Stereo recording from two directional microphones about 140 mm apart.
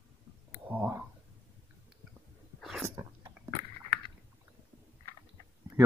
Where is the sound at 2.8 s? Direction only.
25° right (ahead or behind).